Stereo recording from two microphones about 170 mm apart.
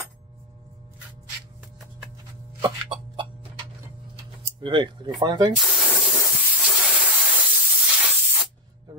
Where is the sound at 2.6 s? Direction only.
30° right (ahead or behind).